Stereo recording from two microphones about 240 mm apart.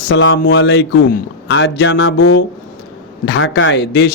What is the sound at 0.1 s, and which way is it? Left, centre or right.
A man's voice, left.